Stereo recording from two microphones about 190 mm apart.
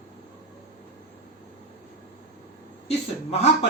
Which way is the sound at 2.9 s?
35° left (ahead or behind).